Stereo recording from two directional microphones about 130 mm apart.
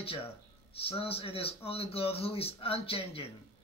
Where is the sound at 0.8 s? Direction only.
45° left (ahead or behind).